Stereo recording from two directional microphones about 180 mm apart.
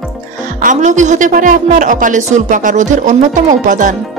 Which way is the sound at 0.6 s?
45° right (ahead or behind).